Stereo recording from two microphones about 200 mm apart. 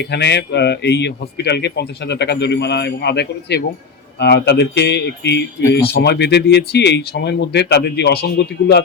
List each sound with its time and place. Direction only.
0.1 s speech: 60° left (ahead or behind)